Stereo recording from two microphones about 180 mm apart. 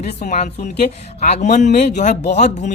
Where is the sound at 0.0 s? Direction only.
40° left (ahead or behind).